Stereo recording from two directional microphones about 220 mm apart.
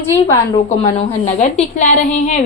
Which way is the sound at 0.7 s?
30° left (ahead or behind).